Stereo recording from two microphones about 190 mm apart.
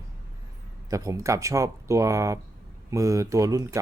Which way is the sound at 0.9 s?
15° right (ahead or behind).